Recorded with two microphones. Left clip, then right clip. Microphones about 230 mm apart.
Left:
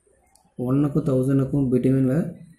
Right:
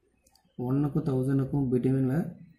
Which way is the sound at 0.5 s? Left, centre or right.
Right.